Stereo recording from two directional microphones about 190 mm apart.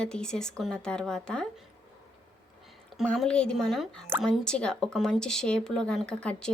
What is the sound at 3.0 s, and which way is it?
Speech, 5° left (ahead or behind).